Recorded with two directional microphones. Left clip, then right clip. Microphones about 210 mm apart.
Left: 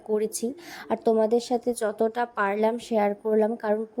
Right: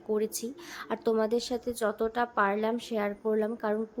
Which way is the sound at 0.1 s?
20° left (ahead or behind).